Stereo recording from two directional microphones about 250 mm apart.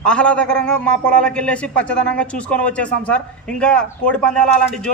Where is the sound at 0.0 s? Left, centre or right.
Centre.